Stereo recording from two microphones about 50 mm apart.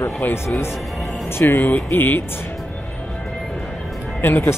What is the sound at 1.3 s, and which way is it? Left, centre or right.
Speech, left.